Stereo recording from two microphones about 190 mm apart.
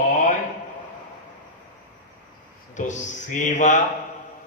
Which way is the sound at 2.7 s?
40° left (ahead or behind).